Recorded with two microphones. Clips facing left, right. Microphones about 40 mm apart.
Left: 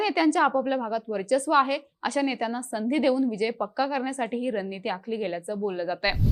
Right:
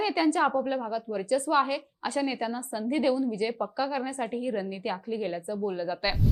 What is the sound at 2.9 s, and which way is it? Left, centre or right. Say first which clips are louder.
A woman's voice: left 3 dB; left.